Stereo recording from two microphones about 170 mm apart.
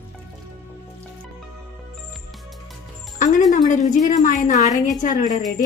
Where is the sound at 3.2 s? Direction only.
50° left (ahead or behind).